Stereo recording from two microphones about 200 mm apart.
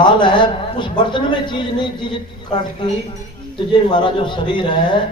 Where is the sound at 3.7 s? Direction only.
25° left (ahead or behind).